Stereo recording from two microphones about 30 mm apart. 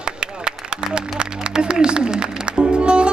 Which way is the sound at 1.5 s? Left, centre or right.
Right.